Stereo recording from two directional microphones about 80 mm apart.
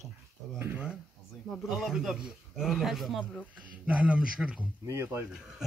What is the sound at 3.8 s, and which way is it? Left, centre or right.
Speech, centre.